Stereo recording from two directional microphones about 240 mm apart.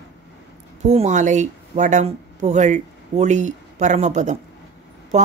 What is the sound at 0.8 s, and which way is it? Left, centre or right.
A woman's voice, right.